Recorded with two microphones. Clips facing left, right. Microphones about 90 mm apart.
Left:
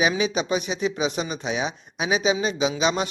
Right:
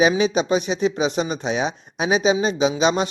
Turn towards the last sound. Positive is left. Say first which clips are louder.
# right 4 dB
turn(degrees=-35)  # may be behind; listen again after turning